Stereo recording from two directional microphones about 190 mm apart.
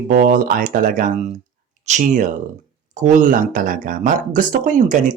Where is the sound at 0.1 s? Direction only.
45° right (ahead or behind).